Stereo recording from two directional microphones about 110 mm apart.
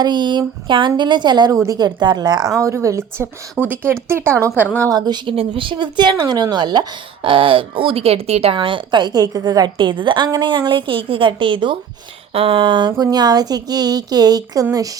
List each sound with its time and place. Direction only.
0.0 s speech: 40° right (ahead or behind); by 3.9 s 20° right (ahead or behind)
4.8 s speech: 35° right (ahead or behind)
5.3 s speech: 55° right (ahead or behind)
12.3 s speech: 60° right (ahead or behind); by 14.8 s 30° right (ahead or behind)